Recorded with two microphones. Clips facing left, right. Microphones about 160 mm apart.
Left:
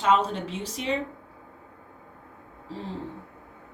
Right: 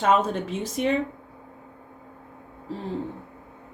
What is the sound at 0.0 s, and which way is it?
Speech, 50° right (ahead or behind).